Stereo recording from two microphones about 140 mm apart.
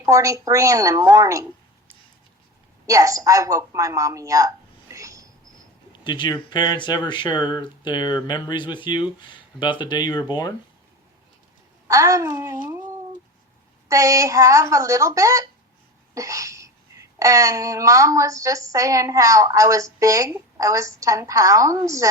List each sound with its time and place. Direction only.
0.0 s speech: 25° right (ahead or behind)
2.8 s a woman's voice: 25° right (ahead or behind)
5.9 s speech: 30° left (ahead or behind)
11.9 s speech: 25° right (ahead or behind)